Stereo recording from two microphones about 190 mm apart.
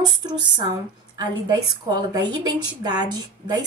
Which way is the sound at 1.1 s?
20° right (ahead or behind).